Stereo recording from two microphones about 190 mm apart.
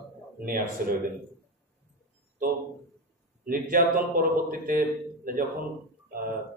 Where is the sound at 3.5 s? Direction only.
50° right (ahead or behind).